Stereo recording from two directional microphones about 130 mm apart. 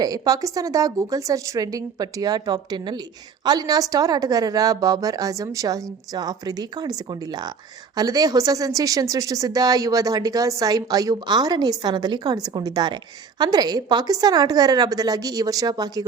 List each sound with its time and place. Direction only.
0.0 s a woman's voice: 30° right (ahead or behind)